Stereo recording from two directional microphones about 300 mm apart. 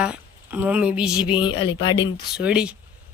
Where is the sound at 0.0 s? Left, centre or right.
Centre.